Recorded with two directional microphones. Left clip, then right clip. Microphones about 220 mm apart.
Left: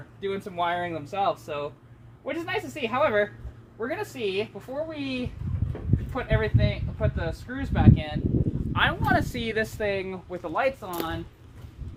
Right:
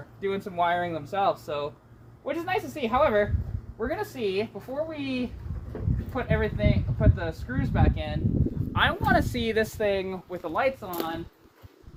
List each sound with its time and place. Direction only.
0.2 s speech: 5° right (ahead or behind)
8.7 s speech: 20° right (ahead or behind); by 11.1 s centre (ahead or behind)